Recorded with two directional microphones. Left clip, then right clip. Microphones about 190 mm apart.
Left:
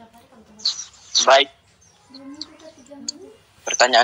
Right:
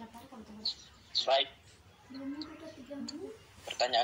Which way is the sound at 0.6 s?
55° left (ahead or behind).